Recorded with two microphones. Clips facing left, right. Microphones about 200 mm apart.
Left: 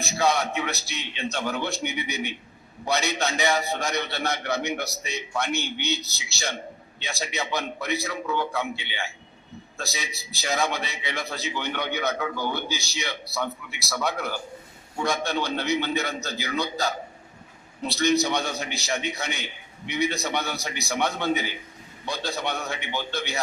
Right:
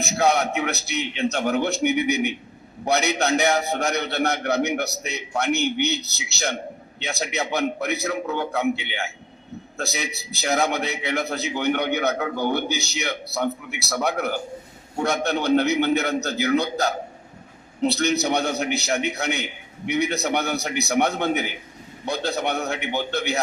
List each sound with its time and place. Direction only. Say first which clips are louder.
0.0 s a man's voice: right 3 dB; 65° right (ahead or behind)
7.6 s a man's voice: right 5 dB; 60° right (ahead or behind)